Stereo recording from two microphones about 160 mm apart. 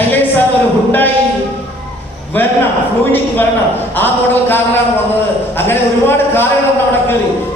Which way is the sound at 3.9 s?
15° left (ahead or behind).